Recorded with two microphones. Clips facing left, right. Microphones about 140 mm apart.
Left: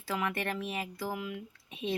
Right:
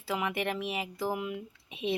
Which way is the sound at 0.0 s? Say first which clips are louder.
Right 2 dB; 15° right (ahead or behind).